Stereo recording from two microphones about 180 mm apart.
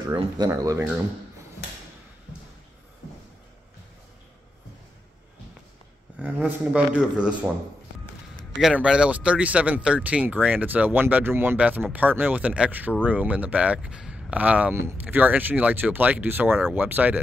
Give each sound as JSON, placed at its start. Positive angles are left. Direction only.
{"t": 0.1, "sound": "speech", "side_deg": -25}
{"t": 0.5, "sound": "speech", "side_deg": -15}
{"t": 6.2, "sound": "a man's voice", "side_deg": -10}
{"t": 8.5, "sound": "speech", "side_deg": -5}